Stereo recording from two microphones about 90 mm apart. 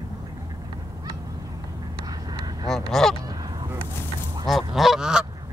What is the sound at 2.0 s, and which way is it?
Vehicle, 45° right (ahead or behind).